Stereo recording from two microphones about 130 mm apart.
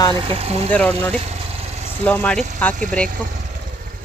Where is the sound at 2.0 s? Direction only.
10° left (ahead or behind).